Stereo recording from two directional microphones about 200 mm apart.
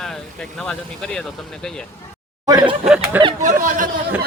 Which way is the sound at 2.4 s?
20° right (ahead or behind).